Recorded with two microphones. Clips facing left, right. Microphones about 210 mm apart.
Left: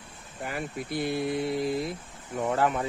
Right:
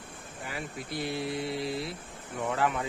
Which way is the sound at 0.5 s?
55° left (ahead or behind).